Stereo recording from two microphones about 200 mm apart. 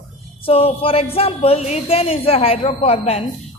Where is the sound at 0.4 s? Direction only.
30° left (ahead or behind).